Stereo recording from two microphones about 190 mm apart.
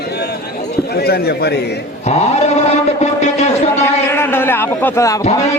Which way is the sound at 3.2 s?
35° left (ahead or behind).